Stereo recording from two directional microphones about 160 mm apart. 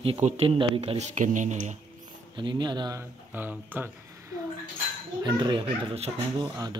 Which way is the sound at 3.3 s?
10° right (ahead or behind).